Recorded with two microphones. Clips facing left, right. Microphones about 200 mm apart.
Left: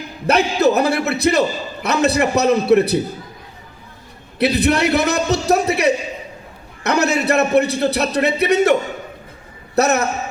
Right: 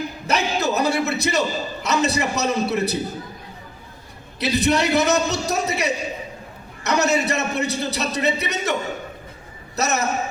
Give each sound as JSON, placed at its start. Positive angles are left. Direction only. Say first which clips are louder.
{"t": 0.3, "sound": "a man's voice", "louder": "left 8 dB", "side_deg": 60}
{"t": 4.4, "sound": "a man's voice", "louder": "left 4 dB", "side_deg": 60}
{"t": 9.7, "sound": "a man's voice", "louder": "left 8 dB", "side_deg": 60}